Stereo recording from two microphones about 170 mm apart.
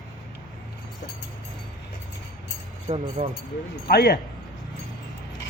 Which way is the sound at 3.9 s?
70° left (ahead or behind).